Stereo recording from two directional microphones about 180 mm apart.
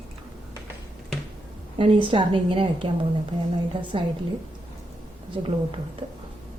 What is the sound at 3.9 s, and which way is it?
Speech, 30° right (ahead or behind).